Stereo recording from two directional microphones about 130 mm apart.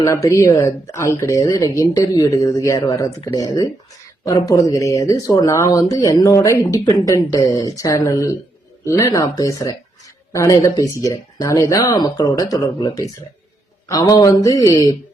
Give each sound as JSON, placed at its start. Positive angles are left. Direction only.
{"t": 0.0, "sound": "speech", "side_deg": 25}